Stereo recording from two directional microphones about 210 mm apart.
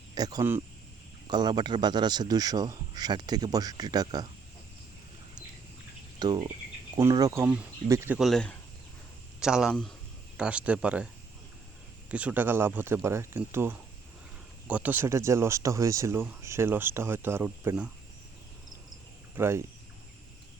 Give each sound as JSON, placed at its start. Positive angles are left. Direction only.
{"t": 0.1, "sound": "speech", "side_deg": -20}
{"t": 6.1, "sound": "speech", "side_deg": -20}
{"t": 12.1, "sound": "speech", "side_deg": -5}
{"t": 19.4, "sound": "speech", "side_deg": -10}